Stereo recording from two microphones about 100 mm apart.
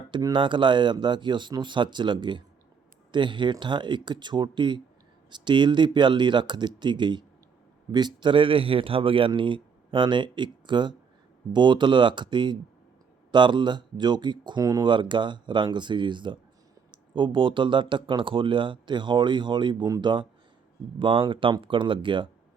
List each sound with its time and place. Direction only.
0.3 s speech: 55° right (ahead or behind)
14.8 s speech: 50° right (ahead or behind)